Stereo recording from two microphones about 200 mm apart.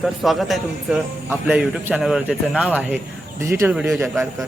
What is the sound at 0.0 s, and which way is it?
A man's voice, centre (ahead or behind).